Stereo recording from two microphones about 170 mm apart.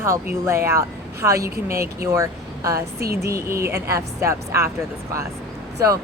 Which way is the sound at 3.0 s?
65° right (ahead or behind).